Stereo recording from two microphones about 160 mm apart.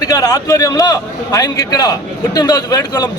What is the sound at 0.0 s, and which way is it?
A man's voice, 20° left (ahead or behind).